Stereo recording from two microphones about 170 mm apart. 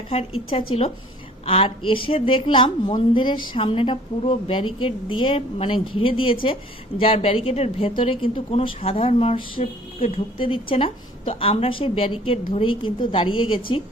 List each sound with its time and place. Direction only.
0.1 s a woman's voice: 35° left (ahead or behind)